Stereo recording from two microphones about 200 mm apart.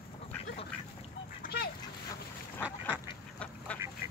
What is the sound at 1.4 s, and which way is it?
Duck, 50° left (ahead or behind).